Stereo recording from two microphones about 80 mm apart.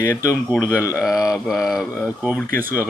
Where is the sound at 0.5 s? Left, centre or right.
Centre.